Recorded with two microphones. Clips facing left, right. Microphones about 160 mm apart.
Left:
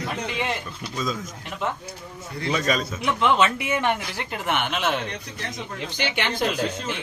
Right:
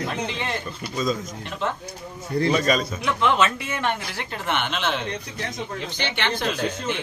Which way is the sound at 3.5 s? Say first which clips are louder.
Left 3 dB; 15° left (ahead or behind).